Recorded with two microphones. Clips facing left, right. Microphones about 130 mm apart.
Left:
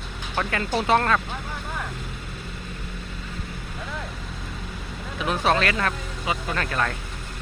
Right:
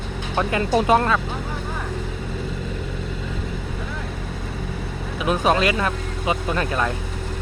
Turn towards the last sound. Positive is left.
turn(degrees=-15)  # may be behind; listen again after turning